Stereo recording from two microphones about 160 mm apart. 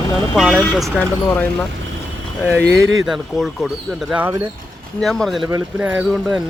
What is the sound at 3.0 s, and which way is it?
Speech, centre (ahead or behind).